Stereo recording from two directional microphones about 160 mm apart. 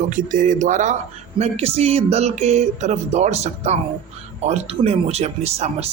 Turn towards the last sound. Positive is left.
turn(degrees=-40)  # may be behind; listen again after turning